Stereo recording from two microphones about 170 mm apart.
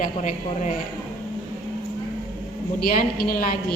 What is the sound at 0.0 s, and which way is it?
Speech, 45° left (ahead or behind).